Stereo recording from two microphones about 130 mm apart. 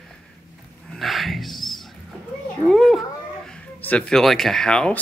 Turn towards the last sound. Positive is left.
turn(degrees=5)  # may be behind; listen again after turning